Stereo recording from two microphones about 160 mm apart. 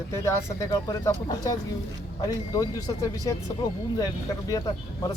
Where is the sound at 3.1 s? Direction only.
20° left (ahead or behind).